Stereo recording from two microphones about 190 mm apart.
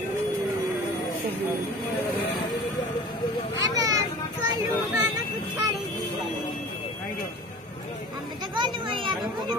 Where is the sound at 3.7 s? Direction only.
20° right (ahead or behind).